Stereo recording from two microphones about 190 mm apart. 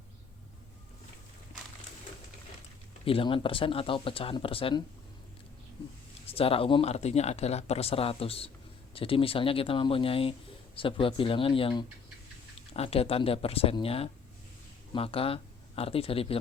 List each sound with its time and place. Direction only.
3.0 s speech: 30° left (ahead or behind)
6.3 s speech: 30° left (ahead or behind)